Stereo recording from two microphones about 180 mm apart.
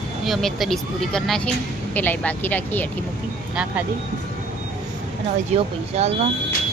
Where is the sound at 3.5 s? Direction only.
5° right (ahead or behind).